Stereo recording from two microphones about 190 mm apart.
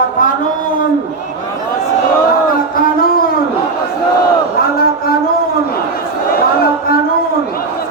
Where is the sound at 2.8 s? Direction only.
50° left (ahead or behind).